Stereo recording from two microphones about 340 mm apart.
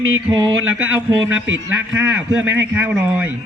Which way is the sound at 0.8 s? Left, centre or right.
Centre.